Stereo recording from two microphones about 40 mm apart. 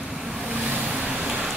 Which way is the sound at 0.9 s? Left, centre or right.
Right.